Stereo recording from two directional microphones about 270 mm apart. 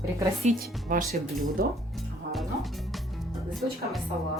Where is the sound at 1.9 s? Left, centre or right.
Centre.